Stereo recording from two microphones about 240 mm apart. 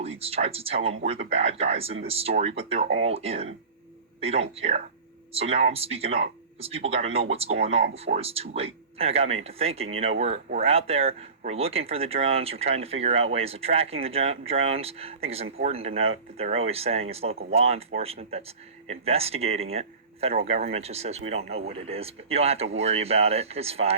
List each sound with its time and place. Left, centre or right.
0.2 s speech: right
19.7 s a sound: right
20.4 s speech: right